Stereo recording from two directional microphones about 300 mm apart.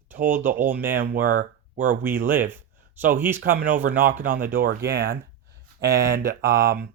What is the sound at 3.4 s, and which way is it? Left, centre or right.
Speech, right.